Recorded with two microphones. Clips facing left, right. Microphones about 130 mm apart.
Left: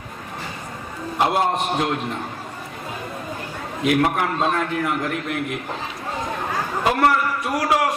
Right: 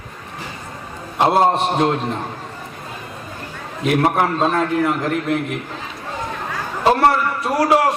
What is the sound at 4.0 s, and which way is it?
A man's voice, 35° right (ahead or behind).